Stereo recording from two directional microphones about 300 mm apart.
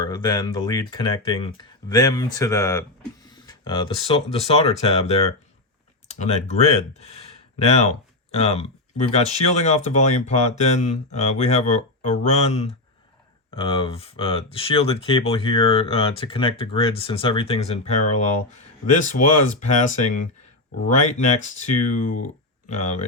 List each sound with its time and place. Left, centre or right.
0.0 s speech: centre
6.1 s speech: left